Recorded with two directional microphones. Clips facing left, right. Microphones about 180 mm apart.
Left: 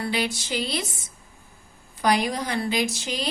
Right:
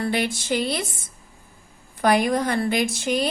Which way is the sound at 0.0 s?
50° right (ahead or behind).